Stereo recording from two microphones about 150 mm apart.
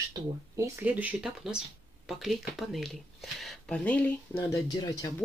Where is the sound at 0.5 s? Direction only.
15° right (ahead or behind); by 4.1 s 10° left (ahead or behind).